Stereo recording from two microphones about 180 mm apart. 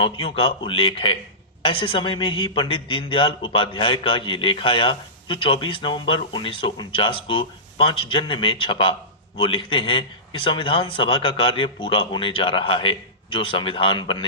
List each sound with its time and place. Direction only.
0.0 s a man's voice: 30° left (ahead or behind)